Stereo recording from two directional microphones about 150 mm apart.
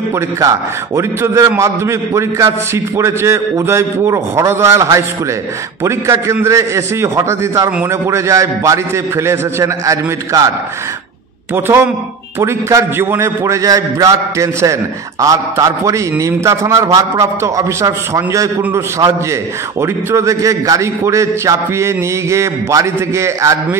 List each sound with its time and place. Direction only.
0.1 s a man's voice: 20° right (ahead or behind)
11.5 s a man's voice: 15° right (ahead or behind)
19.8 s a man's voice: 20° right (ahead or behind)